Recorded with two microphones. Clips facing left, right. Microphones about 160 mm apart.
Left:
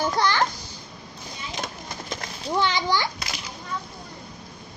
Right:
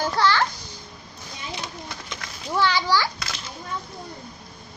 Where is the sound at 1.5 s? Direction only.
45° left (ahead or behind).